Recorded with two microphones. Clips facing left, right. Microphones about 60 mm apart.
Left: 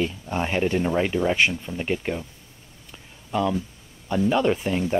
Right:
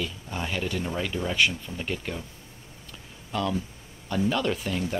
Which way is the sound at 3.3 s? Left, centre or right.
Centre.